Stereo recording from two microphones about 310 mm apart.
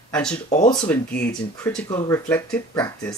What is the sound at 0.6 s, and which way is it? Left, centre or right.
Speech, centre.